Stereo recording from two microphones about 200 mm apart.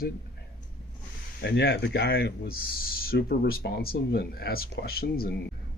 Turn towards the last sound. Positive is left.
turn(degrees=50)  # may be behind; listen again after turning